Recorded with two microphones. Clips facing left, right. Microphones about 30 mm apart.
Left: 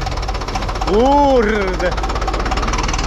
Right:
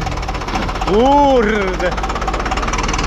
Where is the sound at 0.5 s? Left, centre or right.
Right.